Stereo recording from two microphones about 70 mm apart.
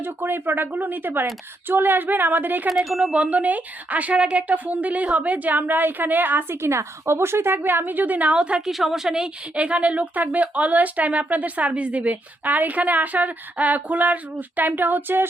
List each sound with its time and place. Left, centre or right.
0.0 s a woman's voice: right
2.6 s speech: centre
3.2 s a woman's voice: right
8.7 s a woman's voice: centre; by 15.3 s right